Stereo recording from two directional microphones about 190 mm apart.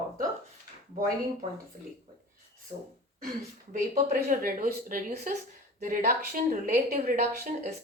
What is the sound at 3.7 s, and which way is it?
Speech, 40° right (ahead or behind).